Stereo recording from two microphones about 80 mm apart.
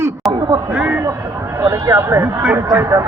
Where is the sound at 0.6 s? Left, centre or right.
Centre.